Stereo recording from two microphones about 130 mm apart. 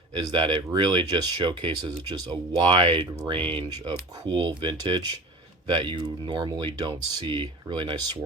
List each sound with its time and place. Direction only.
0.1 s speech: 35° right (ahead or behind)